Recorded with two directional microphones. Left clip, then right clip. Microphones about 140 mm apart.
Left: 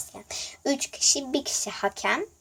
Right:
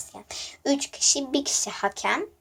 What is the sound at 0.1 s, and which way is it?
Speech, 25° left (ahead or behind).